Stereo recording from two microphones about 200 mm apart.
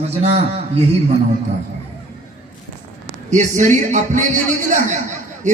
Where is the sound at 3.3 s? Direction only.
35° right (ahead or behind).